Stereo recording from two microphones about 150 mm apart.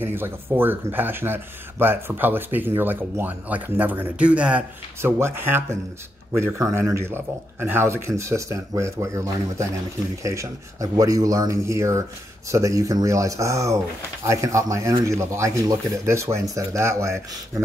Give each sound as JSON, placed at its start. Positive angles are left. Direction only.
{"t": 0.0, "sound": "speech", "side_deg": -15}